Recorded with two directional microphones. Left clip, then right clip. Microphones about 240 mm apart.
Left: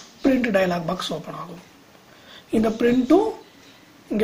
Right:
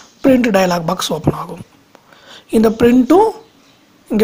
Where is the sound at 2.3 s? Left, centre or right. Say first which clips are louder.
Right 9 dB; right.